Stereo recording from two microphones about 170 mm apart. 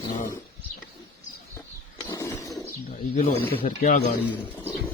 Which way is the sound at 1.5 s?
15° left (ahead or behind).